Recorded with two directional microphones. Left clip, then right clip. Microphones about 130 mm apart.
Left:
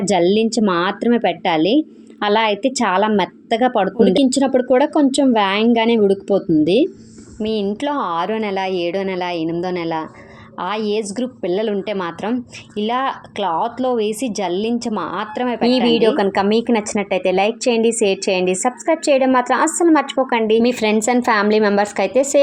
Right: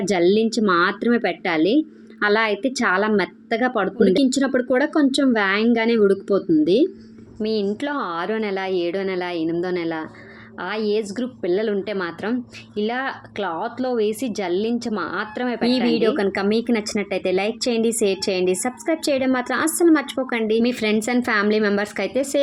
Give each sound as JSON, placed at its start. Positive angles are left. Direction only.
{"t": 0.0, "sound": "a woman's voice", "side_deg": 20}